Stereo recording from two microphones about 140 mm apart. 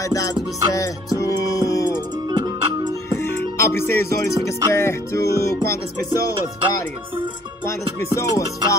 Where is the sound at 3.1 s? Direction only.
15° left (ahead or behind).